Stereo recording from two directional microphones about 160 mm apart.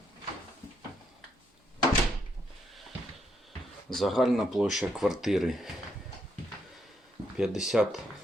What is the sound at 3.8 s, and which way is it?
Speech, centre (ahead or behind).